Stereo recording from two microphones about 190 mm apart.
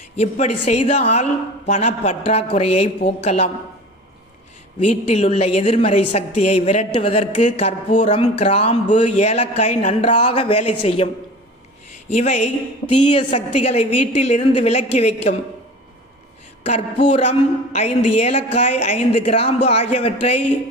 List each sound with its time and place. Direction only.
0.2 s a woman's voice: 35° left (ahead or behind)
4.8 s a woman's voice: 35° left (ahead or behind)
16.6 s a woman's voice: 35° left (ahead or behind)